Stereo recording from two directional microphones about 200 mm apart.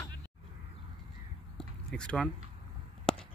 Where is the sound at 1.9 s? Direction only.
5° left (ahead or behind).